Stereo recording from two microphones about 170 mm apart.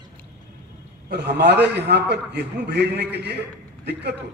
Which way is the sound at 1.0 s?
70° right (ahead or behind).